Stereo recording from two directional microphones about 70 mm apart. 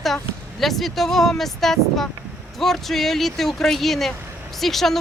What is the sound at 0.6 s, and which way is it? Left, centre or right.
Speech, centre.